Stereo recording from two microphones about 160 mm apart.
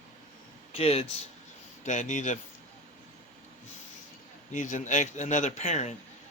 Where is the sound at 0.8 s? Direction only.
40° left (ahead or behind).